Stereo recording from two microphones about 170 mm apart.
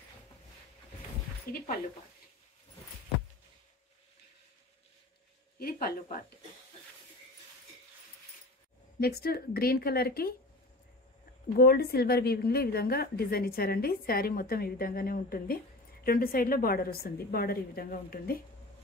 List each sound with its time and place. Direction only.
5.6 s a woman's voice: 60° left (ahead or behind)
9.0 s a woman's voice: 65° left (ahead or behind)
11.5 s a woman's voice: 65° left (ahead or behind)